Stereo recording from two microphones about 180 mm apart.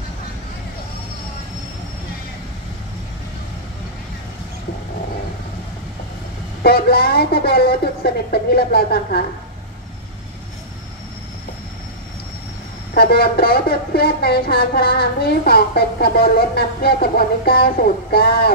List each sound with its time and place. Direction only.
6.6 s speech: 60° left (ahead or behind)
12.9 s speech: 60° left (ahead or behind)